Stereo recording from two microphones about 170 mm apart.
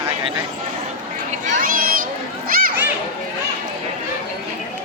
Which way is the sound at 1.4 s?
55° right (ahead or behind).